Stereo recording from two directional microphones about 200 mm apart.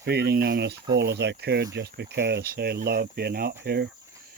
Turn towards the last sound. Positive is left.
turn(degrees=-55)  # may be behind; listen again after turning